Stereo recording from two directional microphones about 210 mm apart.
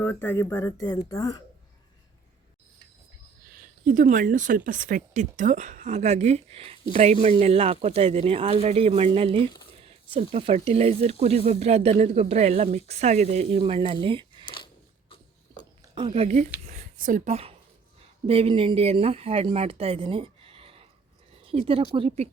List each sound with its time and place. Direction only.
0.0 s speech: 10° left (ahead or behind)
3.5 s speech: 35° right (ahead or behind)
14.4 s a sound: 25° left (ahead or behind)
16.0 s speech: 25° right (ahead or behind)
16.6 s a sound: 40° right (ahead or behind)
18.3 s speech: 25° right (ahead or behind)